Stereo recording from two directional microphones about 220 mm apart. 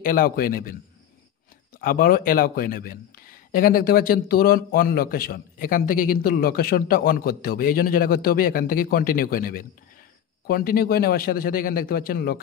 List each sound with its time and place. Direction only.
0.0 s speech: 40° left (ahead or behind)
1.8 s a man's voice: 40° left (ahead or behind)